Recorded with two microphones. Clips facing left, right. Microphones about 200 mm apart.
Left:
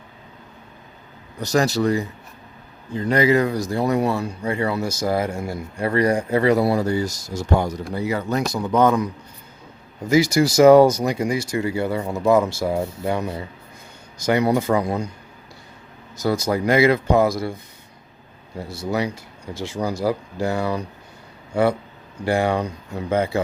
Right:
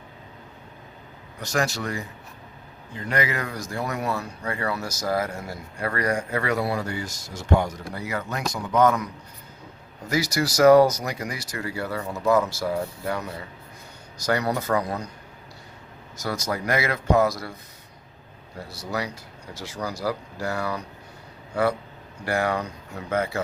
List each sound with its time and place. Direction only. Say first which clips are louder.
1.4 s speech: left 7 dB; 35° left (ahead or behind)
10.1 s speech: left 8 dB; 25° left (ahead or behind)
16.3 s speech: left 7 dB; 30° left (ahead or behind)
18.7 s speech: left 7 dB; 25° left (ahead or behind)